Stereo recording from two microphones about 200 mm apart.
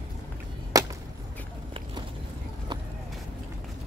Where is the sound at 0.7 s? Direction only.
15° right (ahead or behind).